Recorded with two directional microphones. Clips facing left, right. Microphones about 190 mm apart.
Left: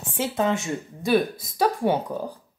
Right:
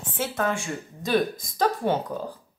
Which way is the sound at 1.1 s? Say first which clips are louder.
Left 2 dB; 10° left (ahead or behind).